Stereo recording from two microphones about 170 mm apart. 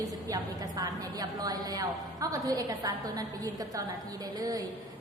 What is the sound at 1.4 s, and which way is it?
A woman's voice, 20° right (ahead or behind).